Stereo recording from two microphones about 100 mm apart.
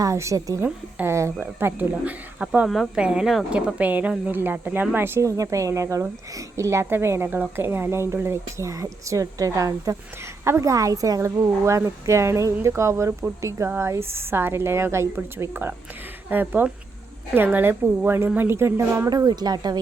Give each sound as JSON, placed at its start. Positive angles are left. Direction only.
{"t": 0.0, "sound": "speech", "side_deg": -30}
{"t": 0.6, "sound": "speech", "side_deg": -25}
{"t": 2.6, "sound": "a woman's voice", "side_deg": 0}
{"t": 3.8, "sound": "a woman's voice", "side_deg": -15}
{"t": 19.1, "sound": "speech", "side_deg": -40}